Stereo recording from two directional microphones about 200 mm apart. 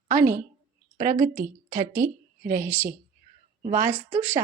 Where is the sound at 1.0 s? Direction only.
40° right (ahead or behind).